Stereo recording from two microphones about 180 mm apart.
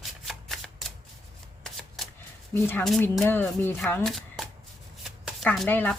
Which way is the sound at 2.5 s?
10° left (ahead or behind).